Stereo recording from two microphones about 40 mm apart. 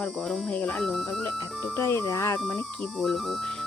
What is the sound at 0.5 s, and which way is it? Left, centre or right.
Speech, left.